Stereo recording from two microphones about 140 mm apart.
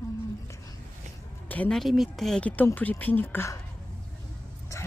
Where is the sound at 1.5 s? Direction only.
5° left (ahead or behind).